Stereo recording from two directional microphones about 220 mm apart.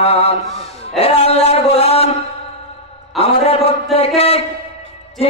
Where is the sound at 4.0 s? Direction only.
25° left (ahead or behind).